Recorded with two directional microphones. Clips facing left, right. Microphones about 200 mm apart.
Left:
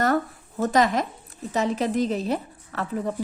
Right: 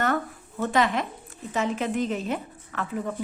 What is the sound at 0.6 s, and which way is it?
A woman's voice, 40° left (ahead or behind).